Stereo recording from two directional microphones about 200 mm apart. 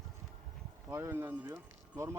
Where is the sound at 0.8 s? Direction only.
15° right (ahead or behind).